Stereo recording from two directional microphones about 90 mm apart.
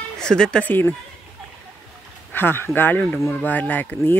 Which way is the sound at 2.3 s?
25° left (ahead or behind).